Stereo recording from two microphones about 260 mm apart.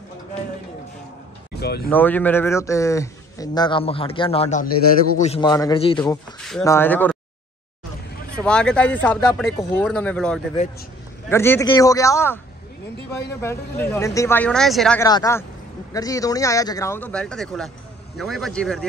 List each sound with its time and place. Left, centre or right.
1.6 s speech: left
1.9 s a man's voice: centre
8.4 s a man's voice: centre
15.0 s a man's voice: centre